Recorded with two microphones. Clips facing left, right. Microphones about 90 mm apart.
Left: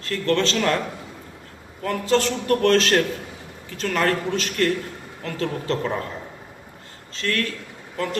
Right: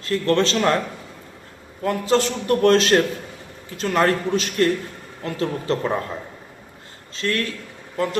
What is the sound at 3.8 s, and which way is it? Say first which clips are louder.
A man's voice: right 3 dB; 30° right (ahead or behind).